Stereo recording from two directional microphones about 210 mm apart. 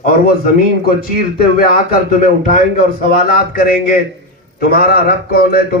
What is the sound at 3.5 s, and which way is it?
A man's voice, 45° left (ahead or behind).